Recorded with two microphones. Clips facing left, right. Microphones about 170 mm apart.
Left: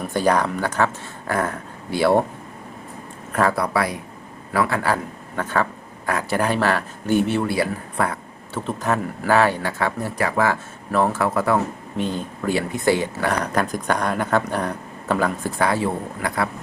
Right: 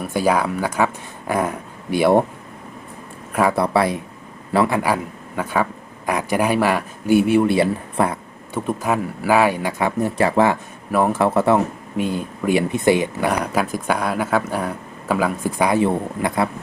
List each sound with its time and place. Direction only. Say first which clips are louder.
0.0 s speech: right 1 dB; 5° right (ahead or behind)
3.5 s speech: right 4 dB; 25° right (ahead or behind)
7.4 s speech: right 5 dB; 25° right (ahead or behind)
8.5 s speech: right 2 dB; 10° right (ahead or behind)
10.9 s speech: right 2 dB; 10° right (ahead or behind)
11.2 s speech: right 4 dB; 25° right (ahead or behind)
11.9 s speech: right 3 dB; 10° right (ahead or behind)